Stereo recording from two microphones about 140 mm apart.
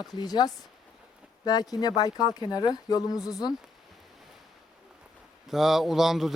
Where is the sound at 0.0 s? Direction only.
30° left (ahead or behind).